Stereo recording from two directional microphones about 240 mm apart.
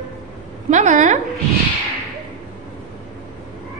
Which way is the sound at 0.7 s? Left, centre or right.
Right.